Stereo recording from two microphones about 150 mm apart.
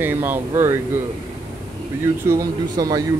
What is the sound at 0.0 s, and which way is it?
Speech, 15° right (ahead or behind).